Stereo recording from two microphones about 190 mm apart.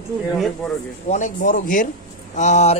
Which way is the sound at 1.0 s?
40° left (ahead or behind).